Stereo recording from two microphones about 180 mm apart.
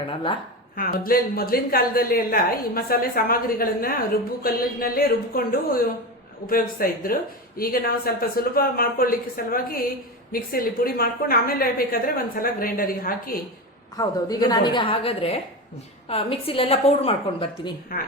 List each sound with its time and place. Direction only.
0.8 s a woman's voice: 55° left (ahead or behind)
13.9 s a woman's voice: 20° left (ahead or behind)
17.9 s a woman's voice: 55° left (ahead or behind)